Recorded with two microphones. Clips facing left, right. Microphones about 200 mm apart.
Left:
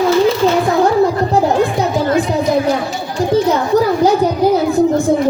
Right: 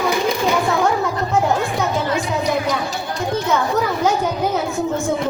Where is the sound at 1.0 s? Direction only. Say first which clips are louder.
Left 6 dB; 35° left (ahead or behind).